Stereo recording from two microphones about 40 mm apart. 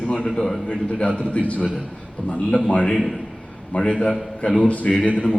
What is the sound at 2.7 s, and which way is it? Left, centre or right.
A man's voice, left.